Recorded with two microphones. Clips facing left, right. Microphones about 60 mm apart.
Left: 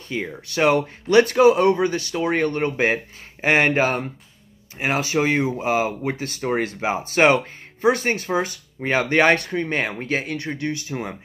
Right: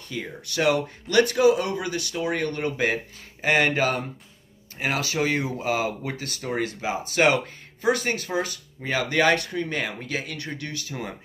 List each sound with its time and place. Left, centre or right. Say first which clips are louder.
0.1 s speech: left 5 dB; left